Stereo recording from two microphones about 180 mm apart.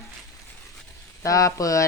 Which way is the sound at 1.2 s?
20° left (ahead or behind).